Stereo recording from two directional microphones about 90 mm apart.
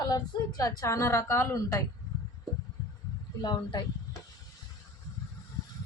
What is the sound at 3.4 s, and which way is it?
Speech, 50° left (ahead or behind).